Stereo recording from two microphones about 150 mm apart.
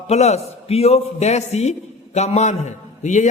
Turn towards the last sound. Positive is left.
turn(degrees=55)  # may be behind; listen again after turning